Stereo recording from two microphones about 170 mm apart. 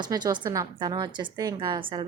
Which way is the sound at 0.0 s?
25° right (ahead or behind).